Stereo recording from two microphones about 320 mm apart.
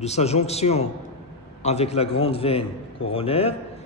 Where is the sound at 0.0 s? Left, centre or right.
Centre.